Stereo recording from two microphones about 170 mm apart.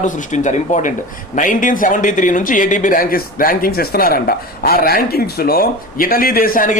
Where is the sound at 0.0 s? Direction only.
45° left (ahead or behind).